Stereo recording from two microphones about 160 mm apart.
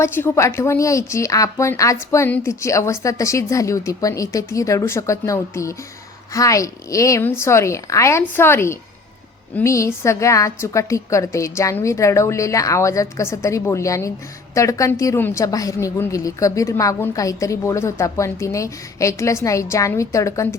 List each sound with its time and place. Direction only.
0.0 s a woman's voice: 15° left (ahead or behind)